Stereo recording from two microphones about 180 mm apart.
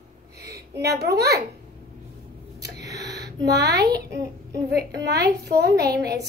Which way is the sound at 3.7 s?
65° right (ahead or behind).